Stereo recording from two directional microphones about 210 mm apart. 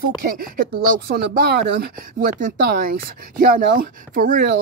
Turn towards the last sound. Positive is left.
turn(degrees=-40)  # may be behind; listen again after turning